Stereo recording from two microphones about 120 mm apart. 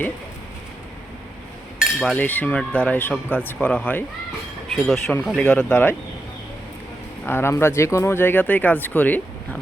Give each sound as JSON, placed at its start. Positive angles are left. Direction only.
{"t": 1.8, "sound": "cutlery", "side_deg": 0}
{"t": 2.1, "sound": "speech", "side_deg": 15}
{"t": 4.7, "sound": "speech", "side_deg": 0}
{"t": 7.3, "sound": "speech", "side_deg": 20}